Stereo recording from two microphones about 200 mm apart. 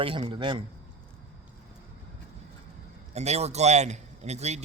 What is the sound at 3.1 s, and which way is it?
A man's voice, 35° right (ahead or behind).